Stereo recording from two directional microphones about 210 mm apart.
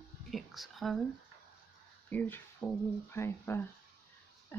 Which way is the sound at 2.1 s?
10° left (ahead or behind).